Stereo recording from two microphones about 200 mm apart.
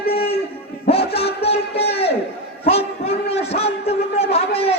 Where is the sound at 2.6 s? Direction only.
30° left (ahead or behind).